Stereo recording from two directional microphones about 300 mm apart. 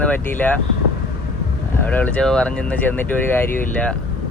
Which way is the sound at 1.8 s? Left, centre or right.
Centre.